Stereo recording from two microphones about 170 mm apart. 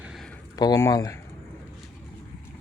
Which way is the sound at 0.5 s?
20° left (ahead or behind).